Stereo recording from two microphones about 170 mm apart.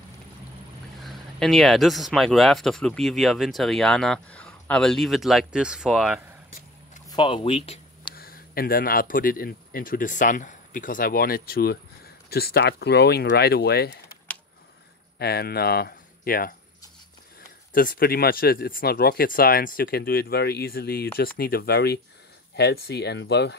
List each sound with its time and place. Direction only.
1.0 s speech: centre (ahead or behind)
7.1 s speech: 30° left (ahead or behind)
8.1 s speech: 60° left (ahead or behind)
15.1 s speech: 65° left (ahead or behind)
17.7 s speech: 60° left (ahead or behind); by 23.5 s 80° left